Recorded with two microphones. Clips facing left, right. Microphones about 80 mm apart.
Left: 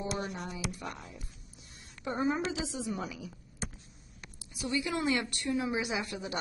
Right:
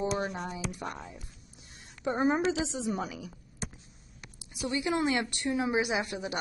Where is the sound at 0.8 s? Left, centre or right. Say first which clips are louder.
Right 3 dB; right.